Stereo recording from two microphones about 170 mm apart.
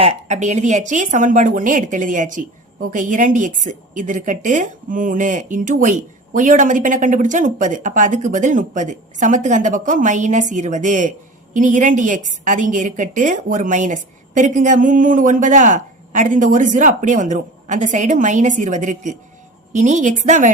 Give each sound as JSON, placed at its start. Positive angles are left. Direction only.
{"t": 0.0, "sound": "a woman's voice", "side_deg": -40}